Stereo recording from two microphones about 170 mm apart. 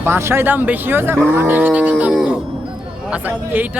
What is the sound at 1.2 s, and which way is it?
Cattle, 10° right (ahead or behind).